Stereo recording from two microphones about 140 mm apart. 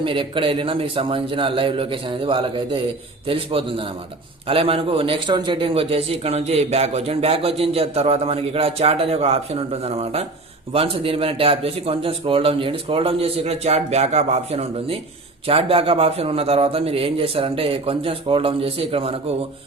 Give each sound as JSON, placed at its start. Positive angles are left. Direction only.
{"t": 0.0, "sound": "a man's voice", "side_deg": -35}